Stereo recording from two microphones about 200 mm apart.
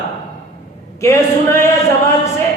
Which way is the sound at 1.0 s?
15° left (ahead or behind).